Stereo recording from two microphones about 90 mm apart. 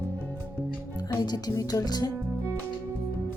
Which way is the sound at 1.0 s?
50° left (ahead or behind).